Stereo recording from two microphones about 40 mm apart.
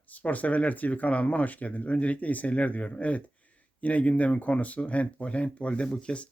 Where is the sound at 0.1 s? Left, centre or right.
Left.